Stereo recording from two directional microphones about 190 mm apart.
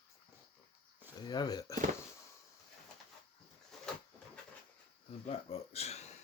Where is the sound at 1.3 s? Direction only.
20° left (ahead or behind).